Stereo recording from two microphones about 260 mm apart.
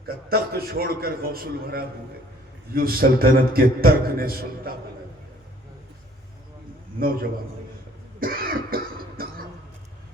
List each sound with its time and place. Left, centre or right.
0.0 s a man's voice: right
7.0 s a man's voice: right
8.2 s cough: right